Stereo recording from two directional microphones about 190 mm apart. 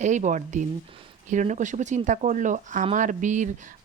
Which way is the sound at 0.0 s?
40° right (ahead or behind).